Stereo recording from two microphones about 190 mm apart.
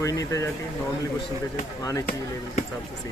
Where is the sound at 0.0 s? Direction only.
15° left (ahead or behind).